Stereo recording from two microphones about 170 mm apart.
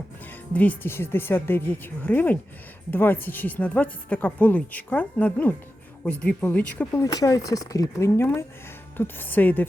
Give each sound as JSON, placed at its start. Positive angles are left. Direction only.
{"t": 0.5, "sound": "speech", "side_deg": 10}
{"t": 7.0, "sound": "speech", "side_deg": 20}